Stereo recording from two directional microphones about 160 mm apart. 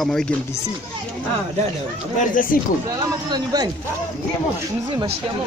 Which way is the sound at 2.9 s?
25° right (ahead or behind).